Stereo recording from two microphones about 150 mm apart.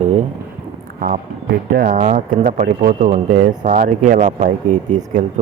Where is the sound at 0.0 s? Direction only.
55° right (ahead or behind).